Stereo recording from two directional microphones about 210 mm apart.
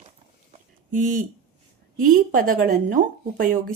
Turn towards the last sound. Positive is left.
turn(degrees=-40)  # may be behind; listen again after turning